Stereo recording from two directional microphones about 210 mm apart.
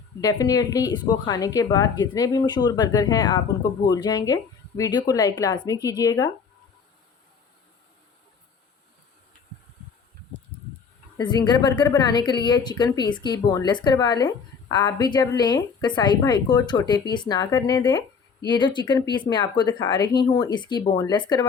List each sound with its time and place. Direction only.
0.2 s a woman's voice: 15° left (ahead or behind)
11.2 s a woman's voice: 20° left (ahead or behind)